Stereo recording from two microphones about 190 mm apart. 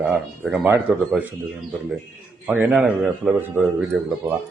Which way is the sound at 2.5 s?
10° right (ahead or behind).